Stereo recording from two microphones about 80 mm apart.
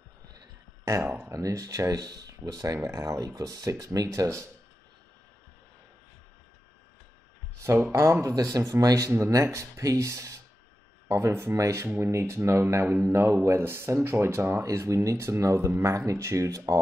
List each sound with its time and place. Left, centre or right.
0.3 s a sound: right
1.3 s speech: right
7.9 s speech: right